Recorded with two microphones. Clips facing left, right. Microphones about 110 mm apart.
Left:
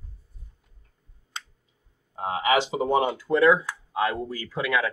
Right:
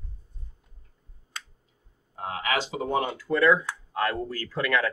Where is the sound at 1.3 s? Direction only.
20° left (ahead or behind).